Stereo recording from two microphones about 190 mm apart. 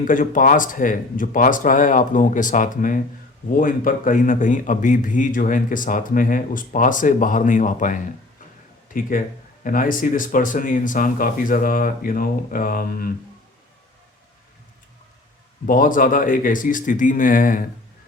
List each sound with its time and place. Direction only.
0.0 s a man's voice: 45° left (ahead or behind)
15.6 s a man's voice: 45° left (ahead or behind)